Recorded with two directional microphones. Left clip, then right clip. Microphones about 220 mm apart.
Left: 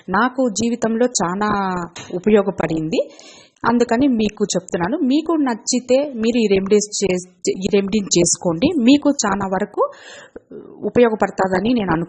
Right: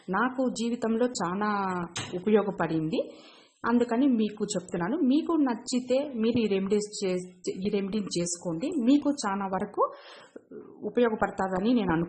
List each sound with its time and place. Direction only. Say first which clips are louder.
0.1 s a woman's voice: left 10 dB; 30° left (ahead or behind)
10.8 s a woman's voice: left 11 dB; 30° left (ahead or behind)